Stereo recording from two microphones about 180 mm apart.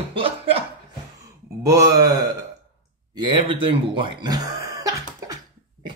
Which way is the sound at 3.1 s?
25° right (ahead or behind).